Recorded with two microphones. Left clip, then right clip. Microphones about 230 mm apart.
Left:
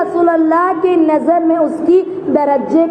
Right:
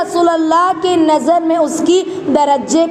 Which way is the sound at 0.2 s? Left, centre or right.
Centre.